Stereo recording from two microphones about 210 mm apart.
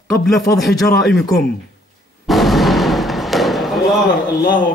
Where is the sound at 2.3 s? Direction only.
Centre (ahead or behind).